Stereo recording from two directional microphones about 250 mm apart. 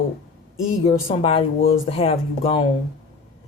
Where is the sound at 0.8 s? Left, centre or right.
Left.